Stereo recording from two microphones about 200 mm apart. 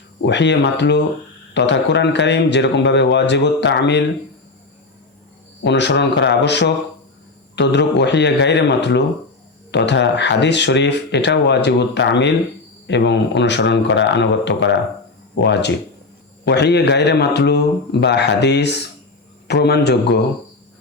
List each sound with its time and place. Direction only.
0.2 s speech: 60° left (ahead or behind)
5.6 s speech: 60° left (ahead or behind)